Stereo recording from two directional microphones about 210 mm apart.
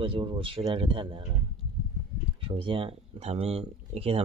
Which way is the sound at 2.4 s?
25° right (ahead or behind).